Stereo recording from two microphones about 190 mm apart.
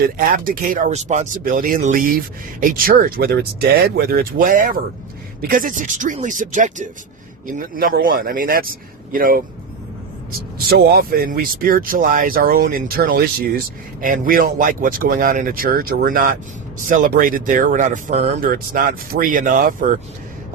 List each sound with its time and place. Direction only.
0.0 s speech: 50° right (ahead or behind)
10.7 s speech: 55° right (ahead or behind)